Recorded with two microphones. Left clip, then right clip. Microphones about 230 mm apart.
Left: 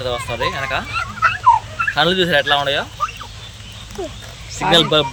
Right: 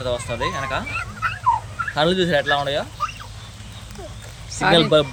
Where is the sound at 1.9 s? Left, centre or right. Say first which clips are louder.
Left 3 dB; centre.